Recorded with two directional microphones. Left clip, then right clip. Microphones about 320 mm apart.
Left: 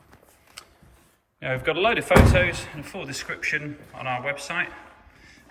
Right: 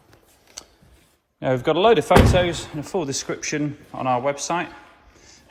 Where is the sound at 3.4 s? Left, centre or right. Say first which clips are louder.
Even; centre.